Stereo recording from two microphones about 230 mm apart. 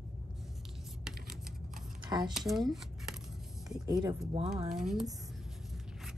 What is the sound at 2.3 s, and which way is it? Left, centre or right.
Speech, centre.